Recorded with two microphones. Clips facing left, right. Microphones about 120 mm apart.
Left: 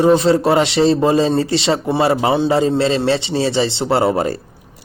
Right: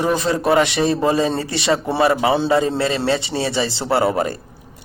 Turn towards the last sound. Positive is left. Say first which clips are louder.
# left 2 dB
turn(degrees=30)  # may be behind; listen again after turning